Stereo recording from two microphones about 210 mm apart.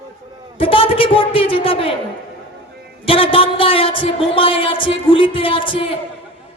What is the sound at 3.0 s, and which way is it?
A woman's voice, 25° left (ahead or behind).